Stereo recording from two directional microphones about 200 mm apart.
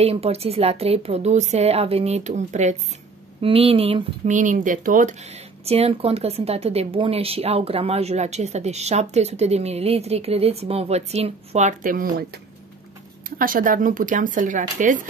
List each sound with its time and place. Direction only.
0.0 s speech: 30° right (ahead or behind); by 12.3 s 45° right (ahead or behind)
13.4 s speech: 45° right (ahead or behind)